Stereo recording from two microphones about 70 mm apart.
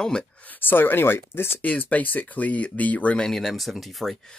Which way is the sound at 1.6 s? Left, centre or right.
Left.